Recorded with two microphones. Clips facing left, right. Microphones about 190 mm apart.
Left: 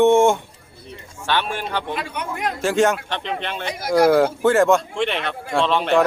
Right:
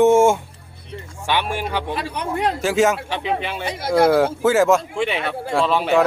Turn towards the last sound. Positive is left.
turn(degrees=-5)  # may be behind; listen again after turning